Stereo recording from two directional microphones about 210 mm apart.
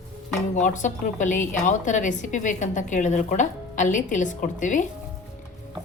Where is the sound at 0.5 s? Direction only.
35° left (ahead or behind).